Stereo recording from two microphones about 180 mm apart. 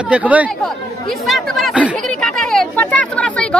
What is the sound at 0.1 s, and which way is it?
Speech, 10° right (ahead or behind).